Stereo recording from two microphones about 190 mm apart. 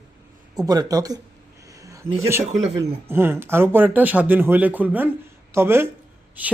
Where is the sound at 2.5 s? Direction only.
35° right (ahead or behind).